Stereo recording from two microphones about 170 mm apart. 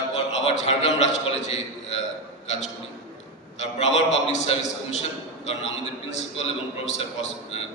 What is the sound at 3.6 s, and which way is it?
A man's voice, 40° left (ahead or behind).